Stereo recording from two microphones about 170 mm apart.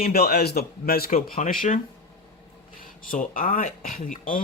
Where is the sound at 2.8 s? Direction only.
50° left (ahead or behind).